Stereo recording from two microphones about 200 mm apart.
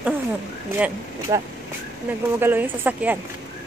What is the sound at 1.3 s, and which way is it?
Speech, 20° right (ahead or behind).